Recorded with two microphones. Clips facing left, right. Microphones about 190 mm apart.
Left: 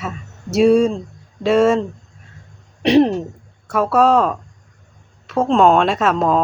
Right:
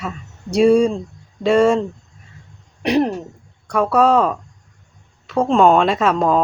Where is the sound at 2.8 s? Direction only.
25° left (ahead or behind).